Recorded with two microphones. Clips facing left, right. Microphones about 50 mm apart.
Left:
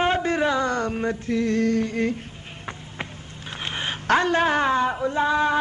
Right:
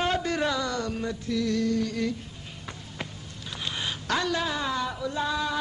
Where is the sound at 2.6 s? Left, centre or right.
Left.